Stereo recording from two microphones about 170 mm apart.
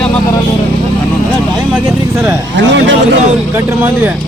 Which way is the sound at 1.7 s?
15° right (ahead or behind).